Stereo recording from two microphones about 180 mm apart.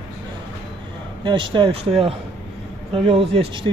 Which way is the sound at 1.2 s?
25° right (ahead or behind).